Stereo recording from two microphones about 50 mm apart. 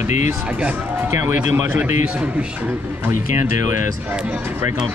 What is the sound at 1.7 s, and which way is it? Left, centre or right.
Speech, right.